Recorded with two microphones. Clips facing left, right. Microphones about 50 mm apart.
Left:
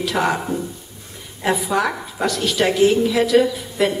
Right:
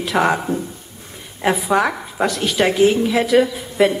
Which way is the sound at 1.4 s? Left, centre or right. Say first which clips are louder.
Right 2 dB; right.